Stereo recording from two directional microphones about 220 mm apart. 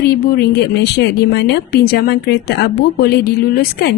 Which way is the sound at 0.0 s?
45° left (ahead or behind).